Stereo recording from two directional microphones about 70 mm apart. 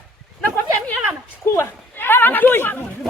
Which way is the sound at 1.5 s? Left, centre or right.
Left.